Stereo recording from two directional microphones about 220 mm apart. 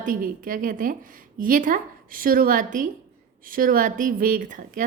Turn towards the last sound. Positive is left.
turn(degrees=-35)  # may be behind; listen again after turning